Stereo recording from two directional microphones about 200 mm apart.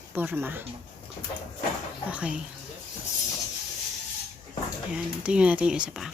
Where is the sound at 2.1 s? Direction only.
5° right (ahead or behind).